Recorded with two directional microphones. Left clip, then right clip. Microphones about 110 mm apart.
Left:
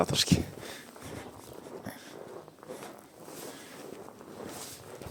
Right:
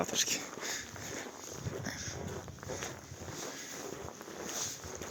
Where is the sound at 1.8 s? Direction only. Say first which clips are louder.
Right 3 dB; 25° left (ahead or behind).